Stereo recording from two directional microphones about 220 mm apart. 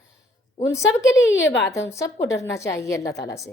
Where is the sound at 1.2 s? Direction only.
55° left (ahead or behind).